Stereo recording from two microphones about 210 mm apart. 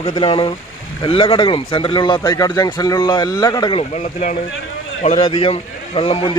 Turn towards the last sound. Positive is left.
turn(degrees=25)  # may be behind; listen again after turning